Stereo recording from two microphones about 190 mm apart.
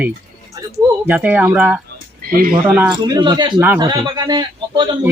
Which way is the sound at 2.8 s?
20° right (ahead or behind).